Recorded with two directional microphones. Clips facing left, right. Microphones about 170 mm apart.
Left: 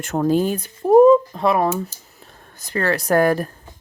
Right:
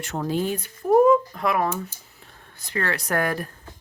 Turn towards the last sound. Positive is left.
turn(degrees=35)  # may be behind; listen again after turning